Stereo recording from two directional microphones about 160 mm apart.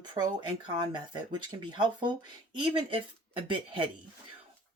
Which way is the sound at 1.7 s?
30° right (ahead or behind).